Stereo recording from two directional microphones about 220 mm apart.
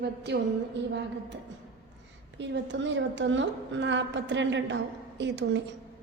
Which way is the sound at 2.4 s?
55° right (ahead or behind).